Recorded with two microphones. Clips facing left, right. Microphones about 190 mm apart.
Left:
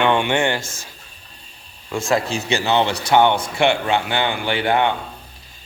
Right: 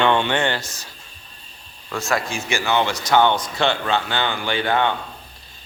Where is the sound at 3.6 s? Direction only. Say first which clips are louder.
Left 4 dB; 15° left (ahead or behind).